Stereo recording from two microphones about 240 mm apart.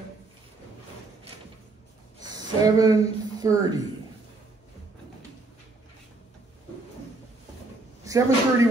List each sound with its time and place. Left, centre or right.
2.1 s speech: centre
8.0 s speech: centre